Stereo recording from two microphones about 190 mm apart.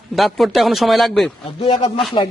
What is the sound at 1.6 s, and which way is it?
Speech, 30° left (ahead or behind).